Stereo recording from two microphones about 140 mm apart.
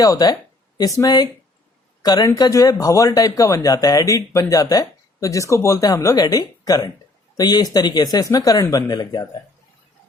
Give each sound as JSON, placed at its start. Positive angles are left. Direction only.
{"t": 0.0, "sound": "speech", "side_deg": 25}